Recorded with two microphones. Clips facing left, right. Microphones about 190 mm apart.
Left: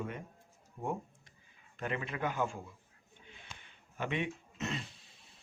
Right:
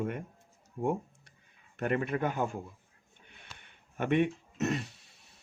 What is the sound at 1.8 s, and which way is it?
Speech, 55° right (ahead or behind).